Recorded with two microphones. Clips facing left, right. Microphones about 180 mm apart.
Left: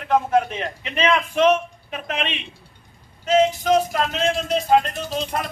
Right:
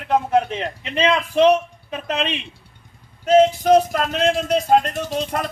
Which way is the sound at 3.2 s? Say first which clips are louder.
Right 4 dB; 55° right (ahead or behind).